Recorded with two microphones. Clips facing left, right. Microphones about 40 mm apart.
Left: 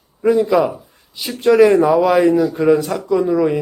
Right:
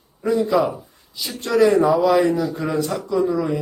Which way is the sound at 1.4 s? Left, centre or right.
Left.